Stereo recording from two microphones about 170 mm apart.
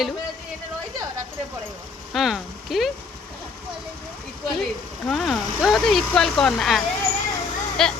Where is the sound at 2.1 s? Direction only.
Centre (ahead or behind).